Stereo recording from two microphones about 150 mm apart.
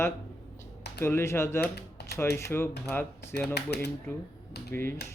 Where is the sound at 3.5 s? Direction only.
90° left.